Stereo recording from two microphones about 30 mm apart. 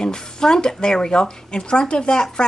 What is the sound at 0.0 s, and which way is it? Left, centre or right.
Speech, left.